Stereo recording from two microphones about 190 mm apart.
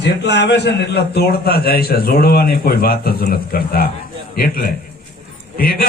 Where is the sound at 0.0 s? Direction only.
65° left (ahead or behind).